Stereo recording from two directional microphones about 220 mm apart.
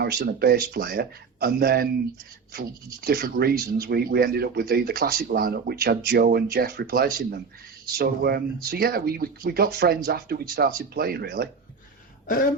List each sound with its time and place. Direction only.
0.0 s speech: 45° right (ahead or behind)